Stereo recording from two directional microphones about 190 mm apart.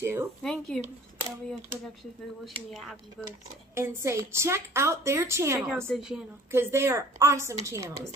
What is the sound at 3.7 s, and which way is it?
A woman's voice, 15° right (ahead or behind).